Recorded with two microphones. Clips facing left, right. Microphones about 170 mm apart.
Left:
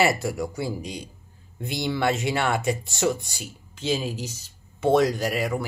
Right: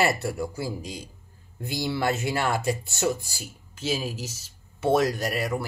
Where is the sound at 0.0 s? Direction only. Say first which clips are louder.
Left 2 dB; centre (ahead or behind).